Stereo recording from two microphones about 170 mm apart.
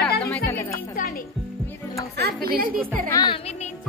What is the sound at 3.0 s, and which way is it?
Speech, 20° left (ahead or behind).